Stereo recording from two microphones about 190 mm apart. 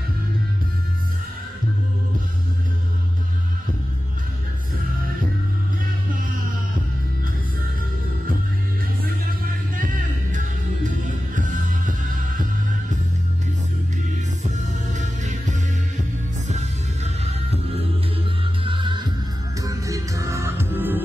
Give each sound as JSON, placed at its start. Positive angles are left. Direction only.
{"t": 9.8, "sound": "music", "side_deg": -45}
{"t": 14.5, "sound": "music", "side_deg": -40}
{"t": 18.6, "sound": "music", "side_deg": -25}